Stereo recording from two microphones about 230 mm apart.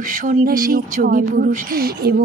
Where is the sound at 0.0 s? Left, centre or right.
Right.